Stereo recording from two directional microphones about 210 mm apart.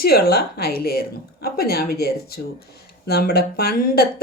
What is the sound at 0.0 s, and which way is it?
Speech, 45° left (ahead or behind).